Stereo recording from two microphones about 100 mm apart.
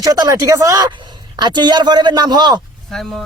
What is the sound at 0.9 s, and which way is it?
A man's voice, 45° right (ahead or behind).